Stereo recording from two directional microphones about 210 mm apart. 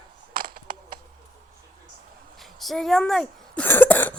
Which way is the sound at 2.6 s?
Centre (ahead or behind).